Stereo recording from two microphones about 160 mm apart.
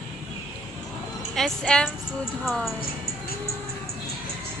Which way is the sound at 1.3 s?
5° left (ahead or behind).